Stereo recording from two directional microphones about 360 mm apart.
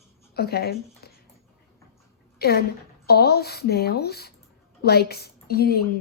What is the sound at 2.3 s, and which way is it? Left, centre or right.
A woman's voice, left.